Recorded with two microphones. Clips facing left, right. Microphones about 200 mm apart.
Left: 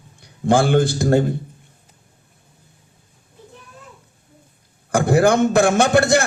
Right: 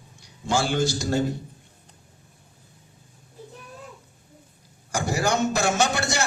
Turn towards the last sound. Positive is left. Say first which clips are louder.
# left 9 dB
turn(degrees=55)  # may be behind; listen again after turning